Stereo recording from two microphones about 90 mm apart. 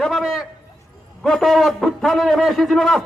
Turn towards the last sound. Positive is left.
turn(degrees=5)  # may be behind; listen again after turning